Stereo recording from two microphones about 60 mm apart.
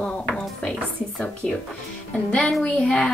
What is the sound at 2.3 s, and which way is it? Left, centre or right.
Speech, centre.